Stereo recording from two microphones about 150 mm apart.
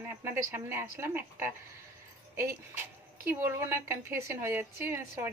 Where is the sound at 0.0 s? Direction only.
15° right (ahead or behind).